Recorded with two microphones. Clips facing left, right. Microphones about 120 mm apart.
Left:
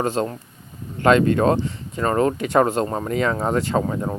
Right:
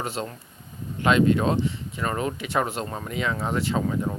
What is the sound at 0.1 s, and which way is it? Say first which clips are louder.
Speech: left 8 dB; 45° left (ahead or behind).